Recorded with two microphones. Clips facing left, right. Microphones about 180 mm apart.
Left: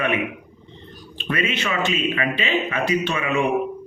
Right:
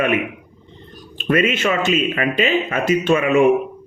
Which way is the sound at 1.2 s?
45° right (ahead or behind).